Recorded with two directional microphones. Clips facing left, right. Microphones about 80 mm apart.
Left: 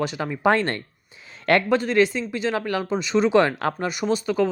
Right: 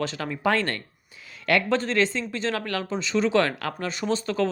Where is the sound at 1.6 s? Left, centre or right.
Centre.